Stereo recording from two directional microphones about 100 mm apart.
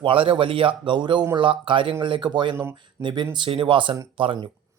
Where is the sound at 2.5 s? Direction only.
25° right (ahead or behind).